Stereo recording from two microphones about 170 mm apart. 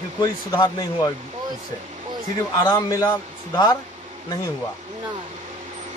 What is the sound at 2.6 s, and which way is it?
Speech, 20° left (ahead or behind).